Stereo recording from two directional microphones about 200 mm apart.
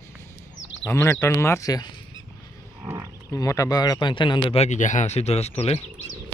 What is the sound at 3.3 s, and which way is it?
Speech, 15° left (ahead or behind).